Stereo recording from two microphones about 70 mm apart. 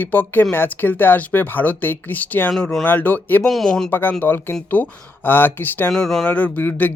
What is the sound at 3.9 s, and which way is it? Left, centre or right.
Speech, left.